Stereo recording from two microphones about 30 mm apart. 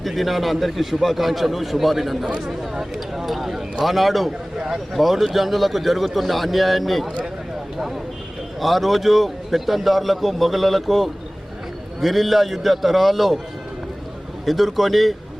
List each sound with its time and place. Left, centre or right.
0.0 s a man's voice: centre
4.3 s speech: centre
4.9 s a man's voice: centre
14.4 s a man's voice: centre